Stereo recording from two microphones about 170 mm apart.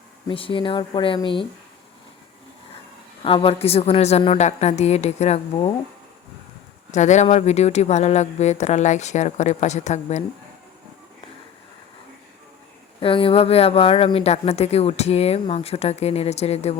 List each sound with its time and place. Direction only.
0.3 s speech: 30° left (ahead or behind)
3.2 s speech: 30° left (ahead or behind)
6.9 s speech: 45° left (ahead or behind)
13.0 s speech: 30° left (ahead or behind)